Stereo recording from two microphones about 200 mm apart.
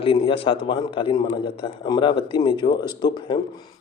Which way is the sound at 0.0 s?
25° left (ahead or behind).